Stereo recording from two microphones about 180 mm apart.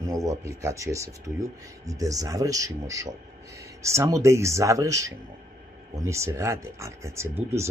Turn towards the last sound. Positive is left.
turn(degrees=-15)  # may be behind; listen again after turning